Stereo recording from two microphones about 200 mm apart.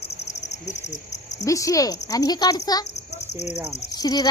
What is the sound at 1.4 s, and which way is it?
Speech, 15° left (ahead or behind).